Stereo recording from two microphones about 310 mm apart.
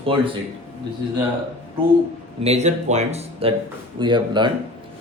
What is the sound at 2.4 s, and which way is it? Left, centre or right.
Speech, right.